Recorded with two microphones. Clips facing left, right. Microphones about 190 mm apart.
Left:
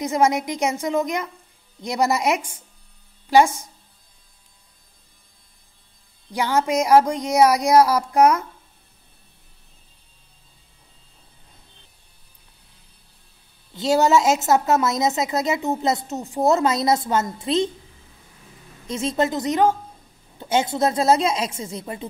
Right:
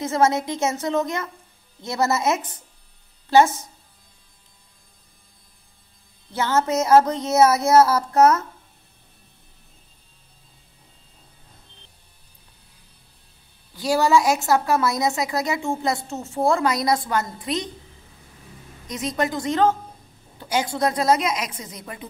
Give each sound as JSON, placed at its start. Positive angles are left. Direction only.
{"t": 0.0, "sound": "speech", "side_deg": 15}
{"t": 6.3, "sound": "speech", "side_deg": 15}
{"t": 13.7, "sound": "a woman's voice", "side_deg": 20}
{"t": 18.9, "sound": "a woman's voice", "side_deg": 25}